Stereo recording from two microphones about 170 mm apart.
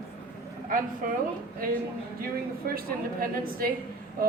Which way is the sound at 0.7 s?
55° right (ahead or behind).